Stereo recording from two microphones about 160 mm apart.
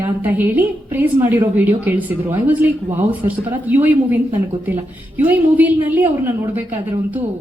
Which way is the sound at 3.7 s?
10° right (ahead or behind).